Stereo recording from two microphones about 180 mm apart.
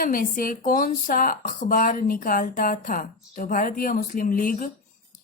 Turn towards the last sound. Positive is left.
turn(degrees=50)  # may be behind; listen again after turning